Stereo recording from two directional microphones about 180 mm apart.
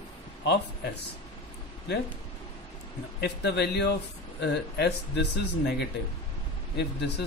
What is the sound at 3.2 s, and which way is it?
A man's voice, 70° left (ahead or behind).